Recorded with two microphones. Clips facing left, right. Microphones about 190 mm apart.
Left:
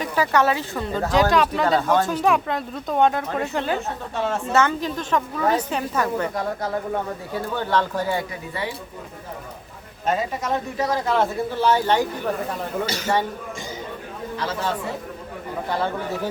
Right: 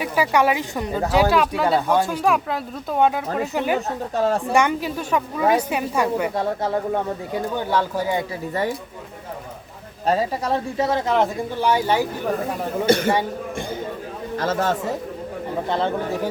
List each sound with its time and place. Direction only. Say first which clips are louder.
0.0 s speech: right 1 dB; 10° right (ahead or behind)
3.8 s a woman's voice: right 4 dB; 35° right (ahead or behind)
4.5 s speech: right 1 dB; 10° right (ahead or behind)
7.3 s speech: even; 15° right (ahead or behind)
10.1 s speech: right 3 dB; 35° right (ahead or behind); by 12.0 s 10° right (ahead or behind)
12.8 s a man's voice: right 9 dB; 55° right (ahead or behind)
14.3 s speech: right 5 dB; 45° right (ahead or behind)